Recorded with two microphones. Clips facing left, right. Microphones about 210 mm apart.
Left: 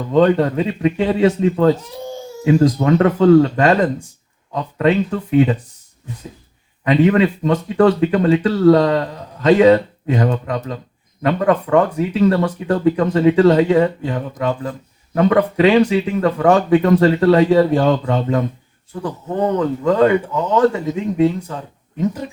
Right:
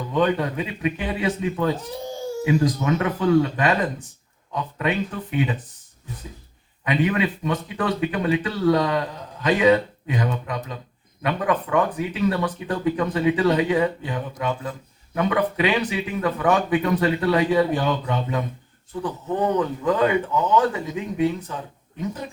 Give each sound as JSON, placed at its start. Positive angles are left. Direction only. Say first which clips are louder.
{"t": 0.2, "sound": "speech", "louder": "left 8 dB", "side_deg": 50}
{"t": 1.0, "sound": "speech", "louder": "left 12 dB", "side_deg": 55}
{"t": 4.5, "sound": "speech", "louder": "left 8 dB", "side_deg": 65}
{"t": 5.3, "sound": "speech", "louder": "left 10 dB", "side_deg": 45}
{"t": 6.9, "sound": "speech", "louder": "left 8 dB", "side_deg": 50}